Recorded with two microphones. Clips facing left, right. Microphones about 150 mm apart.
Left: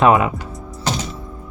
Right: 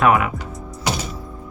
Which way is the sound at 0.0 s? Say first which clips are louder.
Left 3 dB; 25° left (ahead or behind).